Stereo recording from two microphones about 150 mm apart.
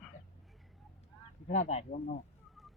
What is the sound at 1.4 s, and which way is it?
Speech, 50° left (ahead or behind).